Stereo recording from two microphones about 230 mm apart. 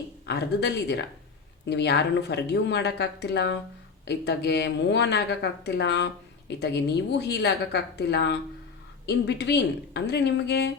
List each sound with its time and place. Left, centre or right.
0.3 s speech: left